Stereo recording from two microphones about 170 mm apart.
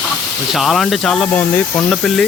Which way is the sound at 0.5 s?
Centre (ahead or behind).